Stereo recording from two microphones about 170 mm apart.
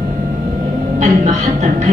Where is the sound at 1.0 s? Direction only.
45° right (ahead or behind).